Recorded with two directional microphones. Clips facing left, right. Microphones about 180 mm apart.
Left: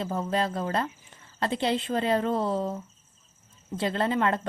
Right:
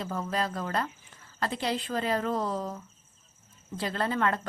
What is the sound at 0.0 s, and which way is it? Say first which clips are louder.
A woman's voice: left 4 dB; 25° left (ahead or behind).